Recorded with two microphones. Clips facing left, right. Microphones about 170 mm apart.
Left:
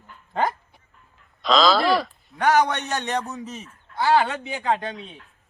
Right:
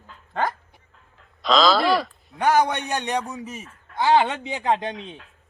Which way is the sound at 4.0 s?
20° right (ahead or behind).